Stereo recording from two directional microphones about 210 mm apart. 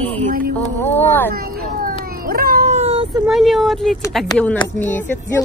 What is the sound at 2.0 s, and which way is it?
Cat, 45° right (ahead or behind).